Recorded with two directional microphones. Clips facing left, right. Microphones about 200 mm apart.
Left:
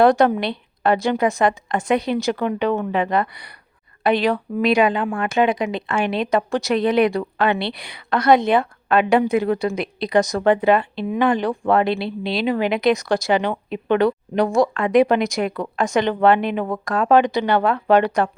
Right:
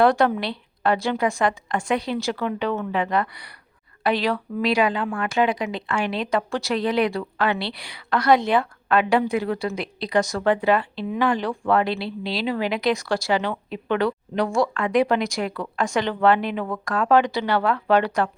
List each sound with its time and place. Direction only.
0.0 s speech: 20° left (ahead or behind)